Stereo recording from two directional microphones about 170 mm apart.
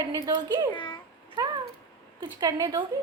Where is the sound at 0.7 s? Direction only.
30° left (ahead or behind).